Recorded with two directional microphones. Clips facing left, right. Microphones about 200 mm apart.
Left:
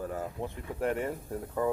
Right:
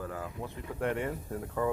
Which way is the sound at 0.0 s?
25° left (ahead or behind).